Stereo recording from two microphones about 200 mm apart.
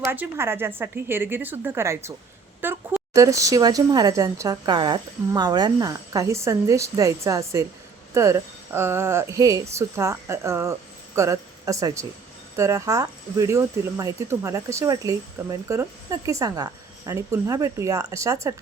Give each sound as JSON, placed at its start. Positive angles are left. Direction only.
{"t": 0.1, "sound": "speech", "side_deg": -10}